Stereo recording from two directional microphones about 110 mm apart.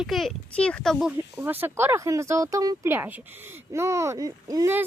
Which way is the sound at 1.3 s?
20° right (ahead or behind).